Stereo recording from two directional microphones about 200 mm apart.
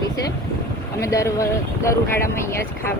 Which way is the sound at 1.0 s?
15° left (ahead or behind).